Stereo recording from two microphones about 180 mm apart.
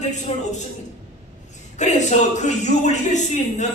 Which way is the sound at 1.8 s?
40° left (ahead or behind).